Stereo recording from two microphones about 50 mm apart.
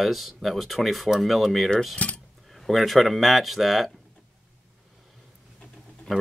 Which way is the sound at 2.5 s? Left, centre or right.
Centre.